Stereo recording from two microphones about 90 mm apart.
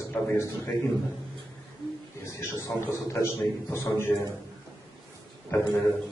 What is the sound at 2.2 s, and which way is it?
A man's voice, 30° left (ahead or behind).